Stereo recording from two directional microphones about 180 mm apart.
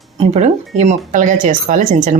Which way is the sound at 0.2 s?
40° right (ahead or behind).